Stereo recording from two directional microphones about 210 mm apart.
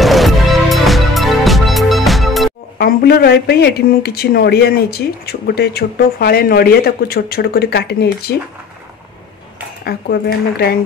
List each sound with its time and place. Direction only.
0.0 s music: centre (ahead or behind)
2.8 s speech: 50° left (ahead or behind)
9.8 s speech: 50° left (ahead or behind)